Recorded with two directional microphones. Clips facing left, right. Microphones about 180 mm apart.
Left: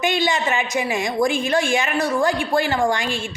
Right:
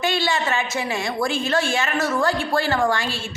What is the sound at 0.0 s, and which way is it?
A woman's voice, 15° left (ahead or behind).